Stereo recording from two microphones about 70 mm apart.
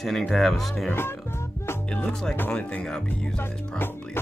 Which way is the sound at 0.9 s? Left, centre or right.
Left.